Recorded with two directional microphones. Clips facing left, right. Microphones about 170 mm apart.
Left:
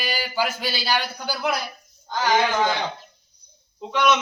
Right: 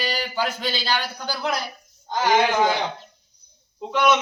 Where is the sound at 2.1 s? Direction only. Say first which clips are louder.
Right 2 dB; 25° right (ahead or behind).